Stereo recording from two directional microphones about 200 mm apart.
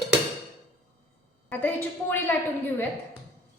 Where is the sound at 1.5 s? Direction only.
10° left (ahead or behind).